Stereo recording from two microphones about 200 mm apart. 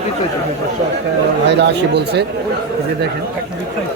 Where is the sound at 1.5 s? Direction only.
60° right (ahead or behind).